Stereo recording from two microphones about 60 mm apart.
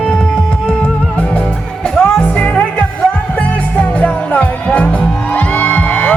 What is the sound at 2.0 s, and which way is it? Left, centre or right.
Music, left.